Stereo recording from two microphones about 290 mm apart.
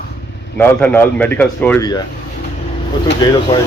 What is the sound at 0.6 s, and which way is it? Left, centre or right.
Speech, centre.